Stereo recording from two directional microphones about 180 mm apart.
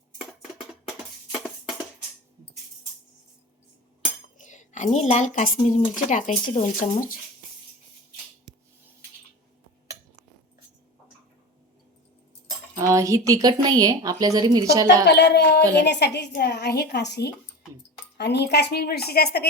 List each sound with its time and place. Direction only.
4.4 s speech: 45° left (ahead or behind)
12.9 s speech: 15° right (ahead or behind)
15.0 s a woman's voice: 70° left (ahead or behind)